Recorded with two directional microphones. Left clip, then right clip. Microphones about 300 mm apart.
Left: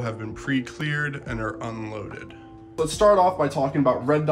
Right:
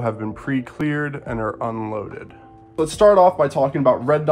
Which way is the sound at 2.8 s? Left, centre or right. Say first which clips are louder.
Right 5 dB; right.